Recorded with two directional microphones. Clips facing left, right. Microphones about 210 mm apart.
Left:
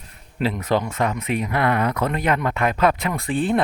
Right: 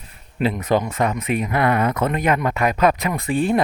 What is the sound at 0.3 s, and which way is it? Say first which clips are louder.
Speech: right 2 dB; 15° right (ahead or behind).